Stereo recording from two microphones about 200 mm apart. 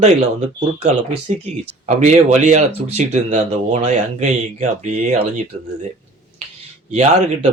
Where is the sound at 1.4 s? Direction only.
35° right (ahead or behind).